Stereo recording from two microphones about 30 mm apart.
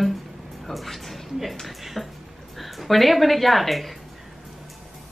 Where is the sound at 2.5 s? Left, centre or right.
Centre.